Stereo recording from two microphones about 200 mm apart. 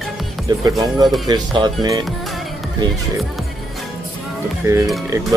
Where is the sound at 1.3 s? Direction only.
20° right (ahead or behind).